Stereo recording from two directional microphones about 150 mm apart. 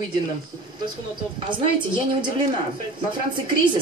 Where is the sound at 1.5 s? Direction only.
30° right (ahead or behind).